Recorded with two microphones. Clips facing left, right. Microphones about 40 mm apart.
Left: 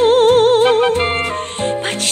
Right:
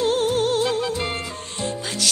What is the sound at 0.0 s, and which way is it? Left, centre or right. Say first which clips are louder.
Music: left 10 dB; left.